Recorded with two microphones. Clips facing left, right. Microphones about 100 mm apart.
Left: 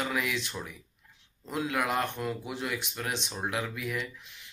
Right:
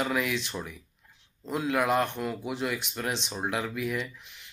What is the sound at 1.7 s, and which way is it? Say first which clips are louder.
Speech: right 5 dB; 30° right (ahead or behind).